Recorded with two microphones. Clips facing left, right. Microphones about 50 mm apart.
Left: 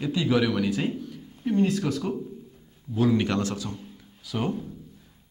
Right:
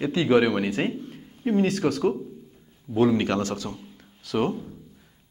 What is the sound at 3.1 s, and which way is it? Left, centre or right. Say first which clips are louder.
Speech: right 1 dB; right.